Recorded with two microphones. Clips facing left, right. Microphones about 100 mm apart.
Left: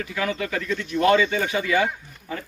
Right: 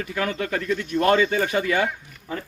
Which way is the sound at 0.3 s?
45° right (ahead or behind).